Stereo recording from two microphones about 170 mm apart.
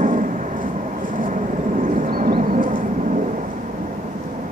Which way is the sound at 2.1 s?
60° right (ahead or behind).